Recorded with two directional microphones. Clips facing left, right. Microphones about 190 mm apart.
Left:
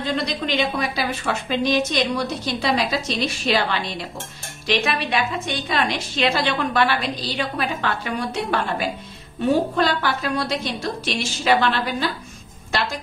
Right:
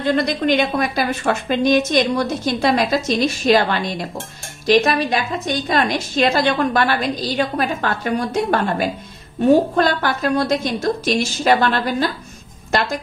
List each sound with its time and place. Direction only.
0.0 s a woman's voice: 50° right (ahead or behind)